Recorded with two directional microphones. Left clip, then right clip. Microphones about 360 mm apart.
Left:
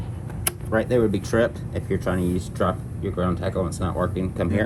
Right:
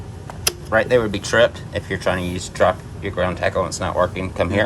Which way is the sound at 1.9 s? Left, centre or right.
Right.